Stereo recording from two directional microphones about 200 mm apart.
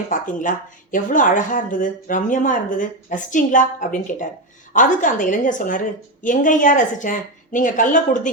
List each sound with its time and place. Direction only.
0.1 s speech: 40° left (ahead or behind)